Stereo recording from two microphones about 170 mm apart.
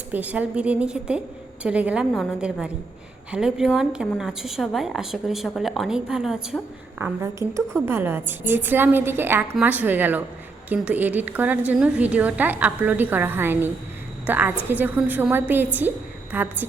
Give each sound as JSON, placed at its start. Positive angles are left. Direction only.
{"t": 0.1, "sound": "a woman's voice", "side_deg": -10}
{"t": 7.0, "sound": "a woman's voice", "side_deg": -15}